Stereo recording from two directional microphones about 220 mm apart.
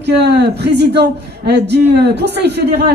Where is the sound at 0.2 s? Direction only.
50° right (ahead or behind).